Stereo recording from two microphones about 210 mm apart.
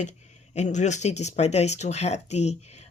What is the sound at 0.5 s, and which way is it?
Speech, 35° left (ahead or behind).